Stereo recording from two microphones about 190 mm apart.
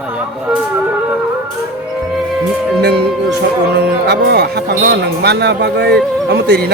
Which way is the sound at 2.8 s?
60° right (ahead or behind).